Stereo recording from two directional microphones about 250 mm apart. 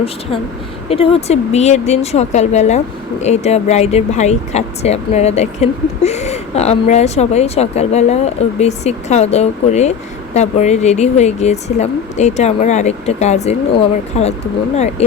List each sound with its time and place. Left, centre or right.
0.9 s speech: left